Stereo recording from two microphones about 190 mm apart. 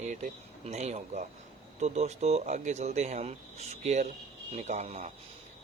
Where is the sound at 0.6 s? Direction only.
35° right (ahead or behind).